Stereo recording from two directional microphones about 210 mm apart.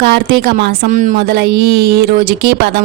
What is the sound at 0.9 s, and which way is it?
Speech, 35° right (ahead or behind).